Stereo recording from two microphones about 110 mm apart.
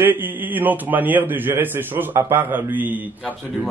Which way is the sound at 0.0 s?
20° right (ahead or behind).